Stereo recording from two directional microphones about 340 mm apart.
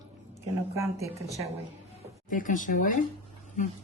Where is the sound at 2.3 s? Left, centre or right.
Left.